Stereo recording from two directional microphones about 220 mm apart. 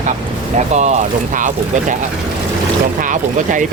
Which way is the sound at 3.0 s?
35° right (ahead or behind).